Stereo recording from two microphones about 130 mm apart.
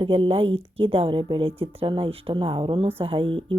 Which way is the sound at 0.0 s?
45° right (ahead or behind).